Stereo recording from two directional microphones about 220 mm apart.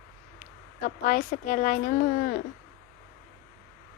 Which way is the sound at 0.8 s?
35° left (ahead or behind).